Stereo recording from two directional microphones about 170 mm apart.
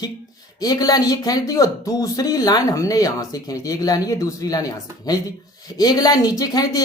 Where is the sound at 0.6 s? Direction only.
20° left (ahead or behind).